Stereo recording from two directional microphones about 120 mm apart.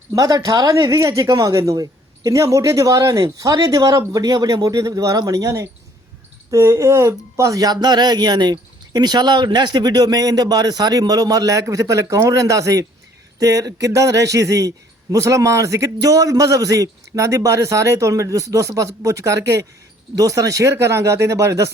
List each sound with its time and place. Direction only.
0.1 s a man's voice: 30° right (ahead or behind)